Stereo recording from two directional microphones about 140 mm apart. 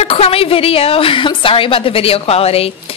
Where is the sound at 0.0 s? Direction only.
45° left (ahead or behind).